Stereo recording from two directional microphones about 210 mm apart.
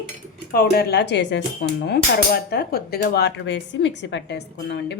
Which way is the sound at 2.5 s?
45° left (ahead or behind).